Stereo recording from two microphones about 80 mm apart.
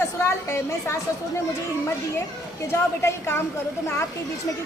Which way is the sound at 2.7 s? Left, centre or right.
Left.